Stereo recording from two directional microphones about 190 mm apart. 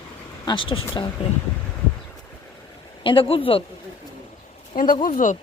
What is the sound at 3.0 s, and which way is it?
Speech, 25° left (ahead or behind).